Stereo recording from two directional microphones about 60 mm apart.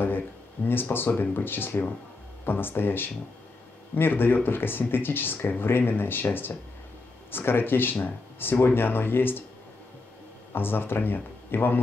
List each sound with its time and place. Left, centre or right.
0.7 s speech: left
7.2 s speech: left
10.5 s speech: left